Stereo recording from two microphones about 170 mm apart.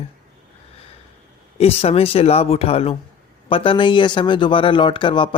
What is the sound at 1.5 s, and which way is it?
Speech, 35° left (ahead or behind).